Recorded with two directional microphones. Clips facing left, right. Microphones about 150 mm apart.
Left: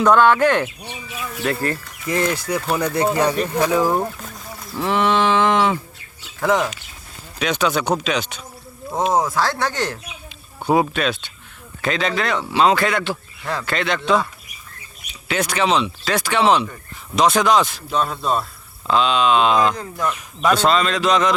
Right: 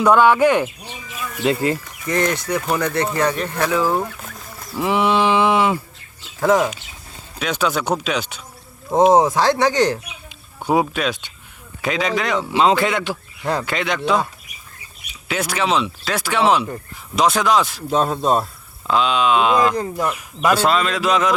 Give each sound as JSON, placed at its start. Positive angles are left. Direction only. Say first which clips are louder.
{"t": 0.0, "sound": "speech", "louder": "right 1 dB", "side_deg": -10}
{"t": 0.9, "sound": "speech", "louder": "left 2 dB", "side_deg": 20}
{"t": 1.5, "sound": "speech", "louder": "right 4 dB", "side_deg": -15}
{"t": 2.0, "sound": "speech", "louder": "right 1 dB", "side_deg": 5}
{"t": 4.7, "sound": "speech", "louder": "right 1 dB", "side_deg": -10}
{"t": 7.3, "sound": "speech", "louder": "left 1 dB", "side_deg": -5}
{"t": 9.1, "sound": "a man's voice", "louder": "right 5 dB", "side_deg": -20}
{"t": 15.3, "sound": "speech", "louder": "left 1 dB", "side_deg": -5}
{"t": 17.9, "sound": "speech", "louder": "right 3 dB", "side_deg": -40}
{"t": 18.9, "sound": "speech", "louder": "even", "side_deg": -5}